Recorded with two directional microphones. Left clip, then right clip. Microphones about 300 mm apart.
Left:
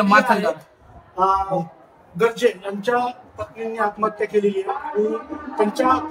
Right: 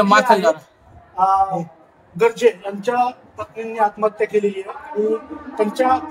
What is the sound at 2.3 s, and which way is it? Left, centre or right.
Speech, right.